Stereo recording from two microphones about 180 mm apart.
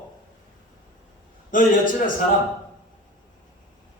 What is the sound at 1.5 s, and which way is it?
Speech, 45° left (ahead or behind).